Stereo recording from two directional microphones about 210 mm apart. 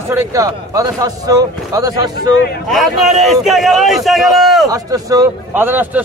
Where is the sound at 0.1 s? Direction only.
15° right (ahead or behind).